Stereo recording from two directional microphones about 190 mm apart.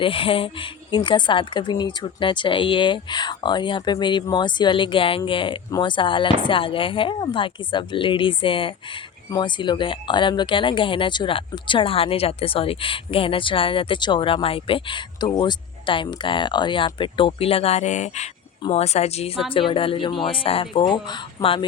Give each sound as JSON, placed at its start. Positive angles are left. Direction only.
{"t": 0.0, "sound": "speech", "side_deg": 30}